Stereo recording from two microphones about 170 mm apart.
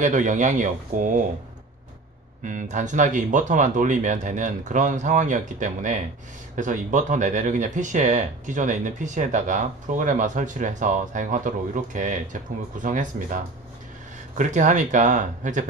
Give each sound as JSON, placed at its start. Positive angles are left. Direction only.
{"t": 0.0, "sound": "speech", "side_deg": -45}
{"t": 2.4, "sound": "speech", "side_deg": -45}